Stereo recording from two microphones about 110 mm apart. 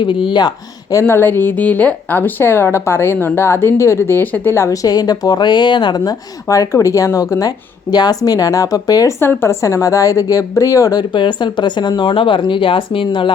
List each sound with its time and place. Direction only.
0.0 s speech: 45° left (ahead or behind)
1.0 s a woman's voice: 20° left (ahead or behind)
9.2 s a woman's voice: 20° left (ahead or behind)
11.1 s speech: 45° left (ahead or behind)